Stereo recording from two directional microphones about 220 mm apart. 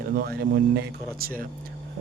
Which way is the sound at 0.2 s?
45° right (ahead or behind).